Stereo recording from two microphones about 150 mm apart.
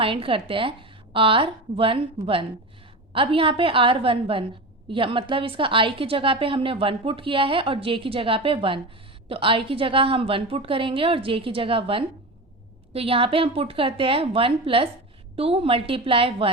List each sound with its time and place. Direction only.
0.0 s a woman's voice: 35° right (ahead or behind)